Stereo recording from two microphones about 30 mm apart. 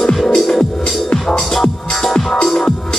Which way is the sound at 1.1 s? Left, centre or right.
Left.